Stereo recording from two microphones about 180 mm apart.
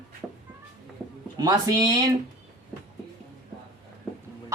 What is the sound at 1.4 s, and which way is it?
Speech, 20° right (ahead or behind).